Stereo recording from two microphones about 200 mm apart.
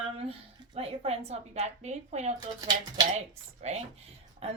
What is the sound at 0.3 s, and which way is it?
A woman's voice, 30° right (ahead or behind).